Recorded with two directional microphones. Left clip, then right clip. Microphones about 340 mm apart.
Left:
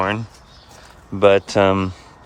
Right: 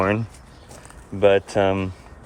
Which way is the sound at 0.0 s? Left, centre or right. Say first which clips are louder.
Even; centre.